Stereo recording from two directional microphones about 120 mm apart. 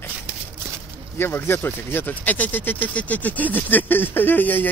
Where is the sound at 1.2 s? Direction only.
20° left (ahead or behind).